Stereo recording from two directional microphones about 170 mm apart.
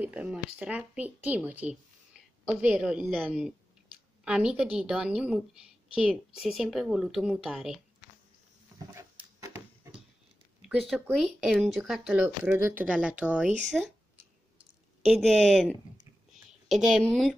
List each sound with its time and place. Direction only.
0.0 s a woman's voice: 5° right (ahead or behind)
8.9 s dog: 15° right (ahead or behind)
10.6 s a woman's voice: centre (ahead or behind)
15.0 s a woman's voice: centre (ahead or behind)